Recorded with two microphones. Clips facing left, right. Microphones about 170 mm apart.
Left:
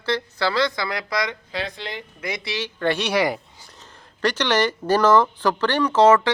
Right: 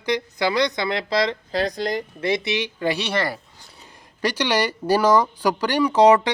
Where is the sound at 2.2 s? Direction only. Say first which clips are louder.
Right 5 dB; 25° right (ahead or behind).